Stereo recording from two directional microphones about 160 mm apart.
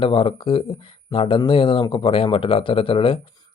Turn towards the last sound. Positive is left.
turn(degrees=35)  # may be behind; listen again after turning